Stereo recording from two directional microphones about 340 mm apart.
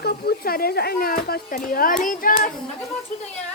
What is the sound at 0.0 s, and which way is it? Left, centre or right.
Speech, left.